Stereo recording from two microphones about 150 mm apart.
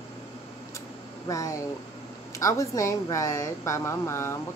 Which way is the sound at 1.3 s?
20° left (ahead or behind).